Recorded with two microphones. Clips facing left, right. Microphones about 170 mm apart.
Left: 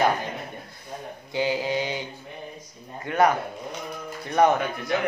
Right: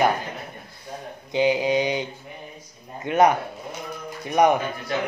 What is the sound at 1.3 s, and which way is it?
Mantra, 20° right (ahead or behind).